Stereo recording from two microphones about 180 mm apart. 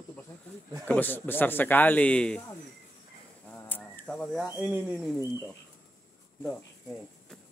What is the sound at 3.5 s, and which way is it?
Bird, 10° left (ahead or behind).